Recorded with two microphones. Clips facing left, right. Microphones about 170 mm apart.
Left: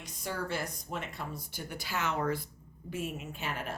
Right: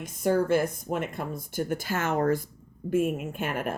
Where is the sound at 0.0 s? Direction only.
50° right (ahead or behind).